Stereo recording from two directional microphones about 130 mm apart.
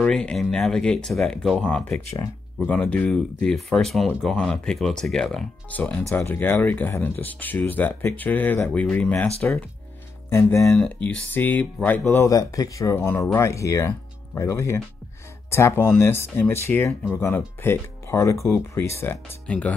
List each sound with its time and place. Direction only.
0.0 s speech: 5° left (ahead or behind)
6.0 s speech: 20° left (ahead or behind)
10.3 s speech: 20° left (ahead or behind)
10.8 s speech: 10° left (ahead or behind)
12.1 s speech: 25° left (ahead or behind)